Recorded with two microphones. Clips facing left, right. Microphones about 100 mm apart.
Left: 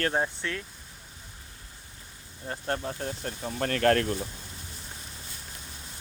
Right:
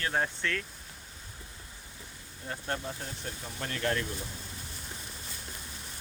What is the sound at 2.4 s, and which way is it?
Speech, 35° left (ahead or behind).